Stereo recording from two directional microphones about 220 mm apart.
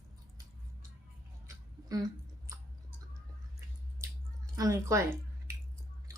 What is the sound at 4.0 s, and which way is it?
Drip, 15° right (ahead or behind).